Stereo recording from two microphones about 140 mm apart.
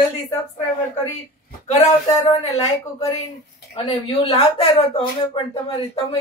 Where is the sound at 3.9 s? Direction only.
40° left (ahead or behind).